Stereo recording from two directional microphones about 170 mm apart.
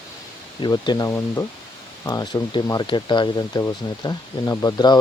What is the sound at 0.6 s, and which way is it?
Speech, 25° left (ahead or behind).